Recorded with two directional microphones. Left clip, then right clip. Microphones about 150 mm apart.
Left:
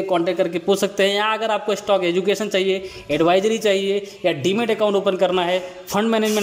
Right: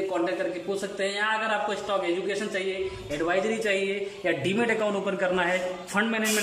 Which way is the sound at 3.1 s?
40° left (ahead or behind).